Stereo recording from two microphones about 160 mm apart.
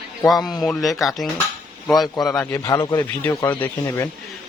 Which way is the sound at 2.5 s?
20° left (ahead or behind).